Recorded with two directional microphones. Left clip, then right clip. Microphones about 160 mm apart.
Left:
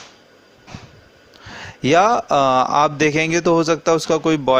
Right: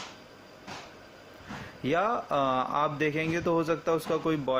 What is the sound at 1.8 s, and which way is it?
A man's voice, 55° left (ahead or behind).